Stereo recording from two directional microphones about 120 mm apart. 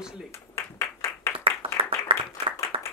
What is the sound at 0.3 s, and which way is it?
Clapping, 25° left (ahead or behind).